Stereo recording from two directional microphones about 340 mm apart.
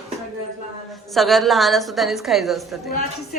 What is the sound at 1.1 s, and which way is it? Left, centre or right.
A woman's voice, centre.